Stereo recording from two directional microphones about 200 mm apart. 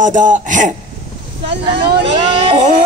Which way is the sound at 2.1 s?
30° right (ahead or behind).